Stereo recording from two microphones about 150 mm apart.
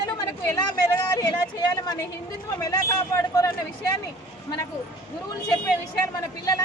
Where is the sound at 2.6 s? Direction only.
20° left (ahead or behind).